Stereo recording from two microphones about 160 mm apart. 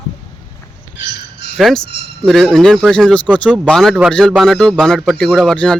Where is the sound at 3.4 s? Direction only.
5° right (ahead or behind).